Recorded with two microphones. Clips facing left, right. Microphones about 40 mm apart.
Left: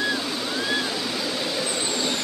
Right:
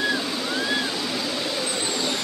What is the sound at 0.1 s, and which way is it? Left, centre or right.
Vehicle, centre.